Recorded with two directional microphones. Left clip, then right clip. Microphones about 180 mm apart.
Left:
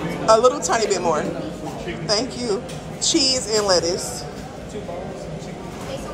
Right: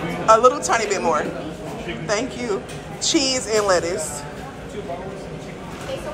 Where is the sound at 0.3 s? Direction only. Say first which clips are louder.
Right 1 dB; 20° left (ahead or behind).